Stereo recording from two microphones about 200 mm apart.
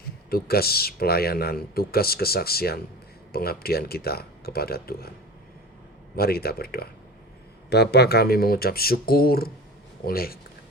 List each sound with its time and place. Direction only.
0.3 s a man's voice: 50° left (ahead or behind)
6.1 s a man's voice: 50° left (ahead or behind)